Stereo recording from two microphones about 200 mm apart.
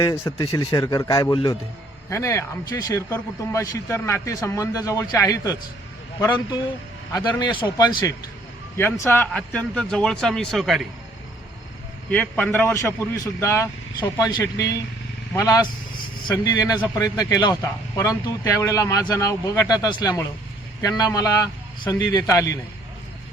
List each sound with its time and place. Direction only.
0.0 s speech: 15° left (ahead or behind)
7.6 s a man's voice: 20° left (ahead or behind)
9.0 s a man's voice: 10° left (ahead or behind)
12.1 s a man's voice: 5° left (ahead or behind)